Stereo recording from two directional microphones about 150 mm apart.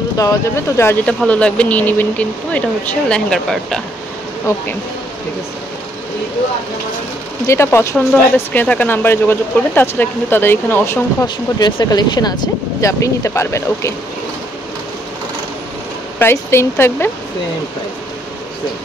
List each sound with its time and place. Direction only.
0.2 s speech: 20° left (ahead or behind)
1.0 s speech: 5° left (ahead or behind)
7.4 s speech: 15° left (ahead or behind)
11.2 s speech: 25° left (ahead or behind)
16.2 s speech: 15° left (ahead or behind)